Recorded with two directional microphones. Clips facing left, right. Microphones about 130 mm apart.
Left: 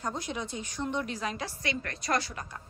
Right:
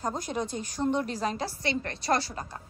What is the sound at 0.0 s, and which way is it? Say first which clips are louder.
A woman's voice: right 4 dB; 40° right (ahead or behind).